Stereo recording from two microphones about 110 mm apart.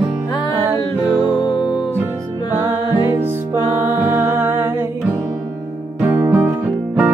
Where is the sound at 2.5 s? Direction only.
20° right (ahead or behind).